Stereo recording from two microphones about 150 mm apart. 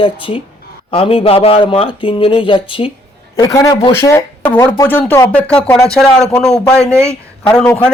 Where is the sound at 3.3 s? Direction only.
20° left (ahead or behind).